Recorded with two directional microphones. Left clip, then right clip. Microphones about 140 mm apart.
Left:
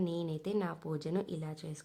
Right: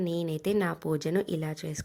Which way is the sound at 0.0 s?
15° right (ahead or behind).